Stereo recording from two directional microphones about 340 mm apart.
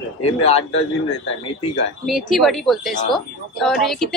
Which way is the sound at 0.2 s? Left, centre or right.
Centre.